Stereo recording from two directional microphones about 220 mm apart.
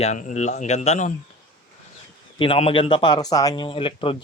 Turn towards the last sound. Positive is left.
turn(degrees=25)  # may be behind; listen again after turning